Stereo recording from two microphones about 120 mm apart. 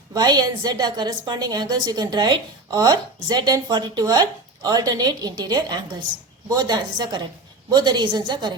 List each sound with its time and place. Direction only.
0.1 s a woman's voice: 35° right (ahead or behind)